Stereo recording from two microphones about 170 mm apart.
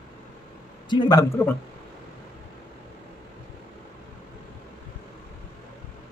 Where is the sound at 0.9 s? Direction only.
25° left (ahead or behind).